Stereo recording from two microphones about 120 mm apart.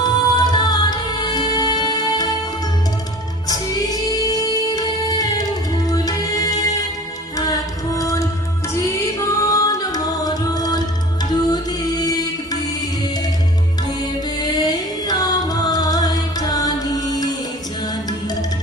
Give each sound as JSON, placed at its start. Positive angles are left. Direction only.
{"t": 0.0, "sound": "music", "side_deg": 35}
{"t": 3.5, "sound": "music", "side_deg": 30}
{"t": 7.9, "sound": "music", "side_deg": 25}
{"t": 14.4, "sound": "music", "side_deg": 35}